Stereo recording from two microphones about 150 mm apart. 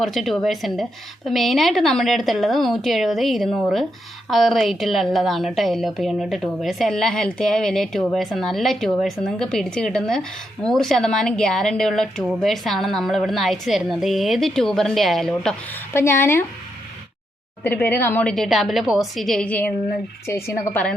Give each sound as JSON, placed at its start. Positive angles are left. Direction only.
{"t": 0.0, "sound": "a woman's voice", "side_deg": 0}
{"t": 15.9, "sound": "a woman's voice", "side_deg": 15}
{"t": 17.6, "sound": "a woman's voice", "side_deg": 15}